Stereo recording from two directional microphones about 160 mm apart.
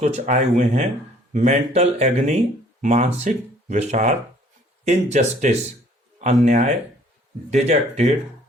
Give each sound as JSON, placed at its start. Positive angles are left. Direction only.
{"t": 0.0, "sound": "speech", "side_deg": -45}